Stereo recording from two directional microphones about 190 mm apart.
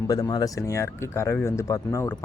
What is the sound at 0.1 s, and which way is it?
Speech, 20° left (ahead or behind).